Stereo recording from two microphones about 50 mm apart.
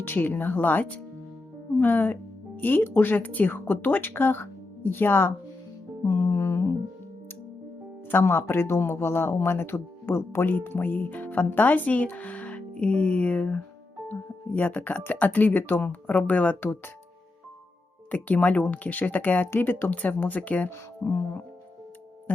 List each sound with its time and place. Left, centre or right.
0.0 s speech: left
6.1 s music: left
8.1 s speech: left
10.5 s speech: left
16.6 s speech: left
18.1 s speech: left
20.7 s speech: left